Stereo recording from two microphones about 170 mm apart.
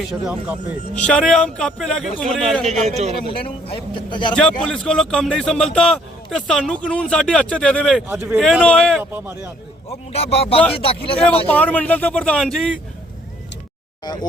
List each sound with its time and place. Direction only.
0.0 s speech: 5° right (ahead or behind)
0.9 s speech: 5° left (ahead or behind)
2.6 s a man's voice: 40° right (ahead or behind)
3.3 s speech: 30° left (ahead or behind)
4.6 s speech: 5° left (ahead or behind)
8.0 s speech: 15° right (ahead or behind)
8.4 s speech: centre (ahead or behind)
9.0 s speech: 10° right (ahead or behind)
9.9 s speech: 35° left (ahead or behind)
11.4 s speech: 10° left (ahead or behind)
14.0 s speech: 25° left (ahead or behind)